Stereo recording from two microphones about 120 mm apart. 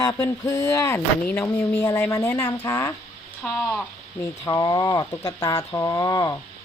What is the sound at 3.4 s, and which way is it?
Speech, 10° left (ahead or behind).